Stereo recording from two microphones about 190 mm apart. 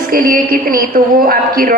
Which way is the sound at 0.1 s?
45° right (ahead or behind).